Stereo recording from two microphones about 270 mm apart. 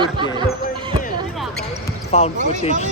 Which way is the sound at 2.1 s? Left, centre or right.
Left.